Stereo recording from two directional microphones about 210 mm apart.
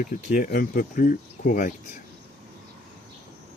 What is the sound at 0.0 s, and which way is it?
Speech, 40° left (ahead or behind).